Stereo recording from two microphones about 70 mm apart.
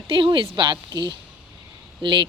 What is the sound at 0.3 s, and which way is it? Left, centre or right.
Mantra, right.